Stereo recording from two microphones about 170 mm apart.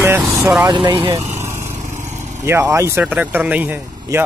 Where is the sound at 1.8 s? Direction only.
45° right (ahead or behind).